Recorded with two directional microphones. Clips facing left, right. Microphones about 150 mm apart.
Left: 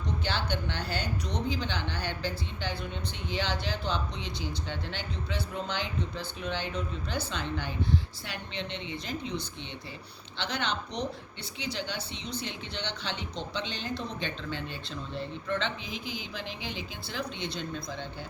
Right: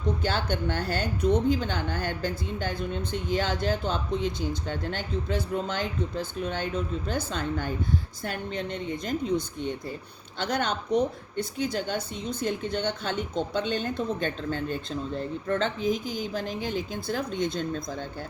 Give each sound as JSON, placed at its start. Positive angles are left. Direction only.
{"t": 0.2, "sound": "speech", "side_deg": -50}